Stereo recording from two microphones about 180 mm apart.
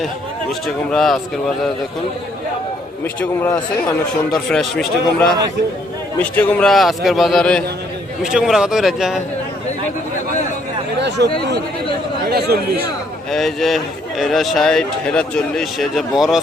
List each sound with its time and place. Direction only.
0.9 s a man's voice: centre (ahead or behind)
3.0 s speech: 10° left (ahead or behind)
4.3 s a man's voice: centre (ahead or behind)
12.3 s speech: 60° right (ahead or behind)
13.3 s a man's voice: centre (ahead or behind)